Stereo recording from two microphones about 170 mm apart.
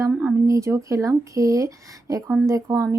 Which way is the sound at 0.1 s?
10° right (ahead or behind).